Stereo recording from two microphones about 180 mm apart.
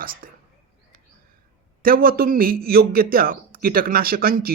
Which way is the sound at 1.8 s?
55° right (ahead or behind).